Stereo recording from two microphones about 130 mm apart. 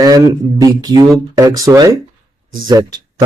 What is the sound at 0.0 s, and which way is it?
A man's voice, 30° right (ahead or behind).